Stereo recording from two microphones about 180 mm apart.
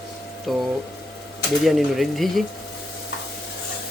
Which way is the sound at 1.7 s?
Centre (ahead or behind).